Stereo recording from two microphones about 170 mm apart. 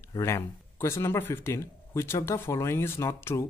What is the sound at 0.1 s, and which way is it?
Speech, 20° left (ahead or behind).